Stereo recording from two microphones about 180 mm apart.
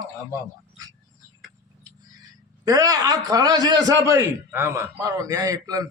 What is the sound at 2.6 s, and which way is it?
A man's voice, 20° right (ahead or behind).